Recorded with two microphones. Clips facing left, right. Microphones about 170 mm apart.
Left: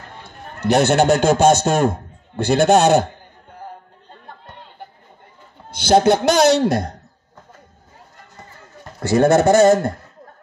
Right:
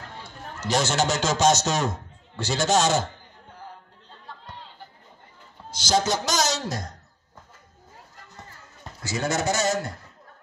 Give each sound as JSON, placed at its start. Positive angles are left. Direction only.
{"t": 0.2, "sound": "a man's voice", "side_deg": 55}
{"t": 3.6, "sound": "a sound", "side_deg": 55}
{"t": 5.7, "sound": "a man's voice", "side_deg": 60}
{"t": 9.0, "sound": "a man's voice", "side_deg": 60}